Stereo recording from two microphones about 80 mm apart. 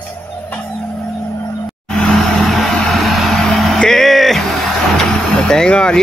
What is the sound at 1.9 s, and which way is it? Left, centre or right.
Vehicle, centre.